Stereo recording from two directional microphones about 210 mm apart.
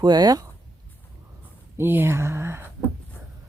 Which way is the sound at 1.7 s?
10° right (ahead or behind).